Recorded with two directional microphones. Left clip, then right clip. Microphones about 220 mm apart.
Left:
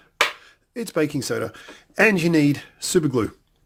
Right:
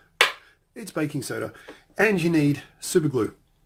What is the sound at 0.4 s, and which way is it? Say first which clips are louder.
Speech: left 9 dB; 40° left (ahead or behind).